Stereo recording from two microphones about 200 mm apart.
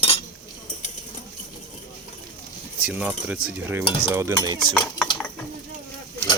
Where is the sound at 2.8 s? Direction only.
5° right (ahead or behind).